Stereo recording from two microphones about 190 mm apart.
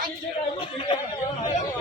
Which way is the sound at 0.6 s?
30° left (ahead or behind).